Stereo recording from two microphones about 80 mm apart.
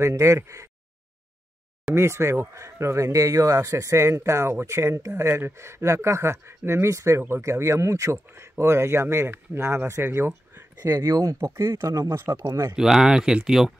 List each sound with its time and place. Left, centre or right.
0.0 s speech: right
2.0 s speech: right
10.9 s speech: right
12.7 s speech: centre